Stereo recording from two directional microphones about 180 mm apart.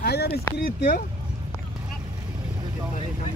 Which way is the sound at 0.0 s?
60° left (ahead or behind).